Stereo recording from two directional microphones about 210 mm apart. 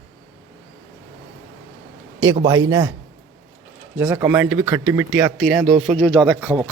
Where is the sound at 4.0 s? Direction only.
10° right (ahead or behind).